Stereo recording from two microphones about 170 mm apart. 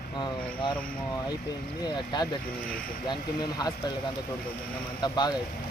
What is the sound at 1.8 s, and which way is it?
Speech, 25° left (ahead or behind).